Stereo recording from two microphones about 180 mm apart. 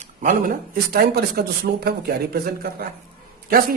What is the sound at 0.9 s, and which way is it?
Speech, 60° right (ahead or behind).